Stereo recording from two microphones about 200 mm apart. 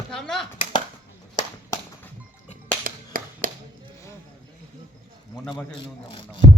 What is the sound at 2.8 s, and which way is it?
Music, 45° right (ahead or behind).